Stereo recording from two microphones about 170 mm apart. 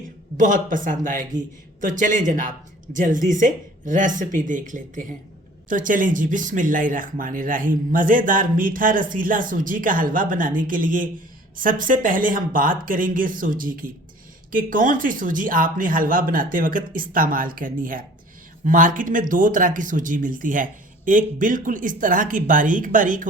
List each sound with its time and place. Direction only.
0.3 s speech: 50° right (ahead or behind)